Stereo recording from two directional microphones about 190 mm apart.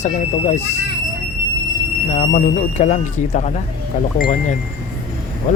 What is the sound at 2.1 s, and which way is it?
Speech, 35° left (ahead or behind).